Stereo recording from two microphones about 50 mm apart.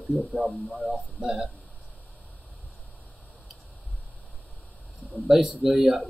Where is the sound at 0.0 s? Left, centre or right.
Right.